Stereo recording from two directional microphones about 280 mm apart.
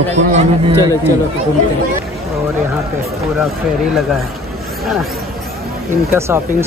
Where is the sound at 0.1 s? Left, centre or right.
Right.